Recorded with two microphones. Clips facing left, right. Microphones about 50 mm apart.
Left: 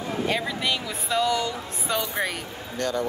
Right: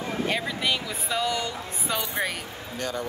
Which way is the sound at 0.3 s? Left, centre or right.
Centre.